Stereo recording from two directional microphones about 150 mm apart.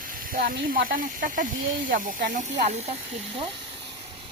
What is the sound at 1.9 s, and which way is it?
Speech, 65° right (ahead or behind).